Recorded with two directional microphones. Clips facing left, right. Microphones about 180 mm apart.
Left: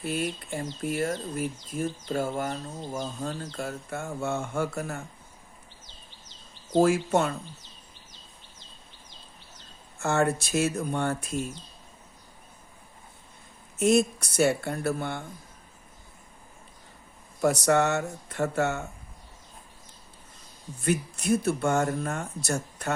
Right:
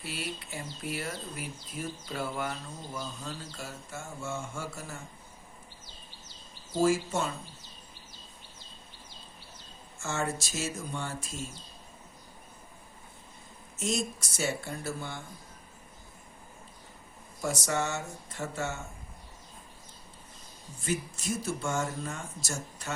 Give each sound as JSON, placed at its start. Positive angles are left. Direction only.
{"t": 0.0, "sound": "speech", "side_deg": 50}
{"t": 6.7, "sound": "speech", "side_deg": 60}
{"t": 10.0, "sound": "speech", "side_deg": 60}
{"t": 13.7, "sound": "speech", "side_deg": 60}
{"t": 17.4, "sound": "speech", "side_deg": 65}
{"t": 20.8, "sound": "speech", "side_deg": 60}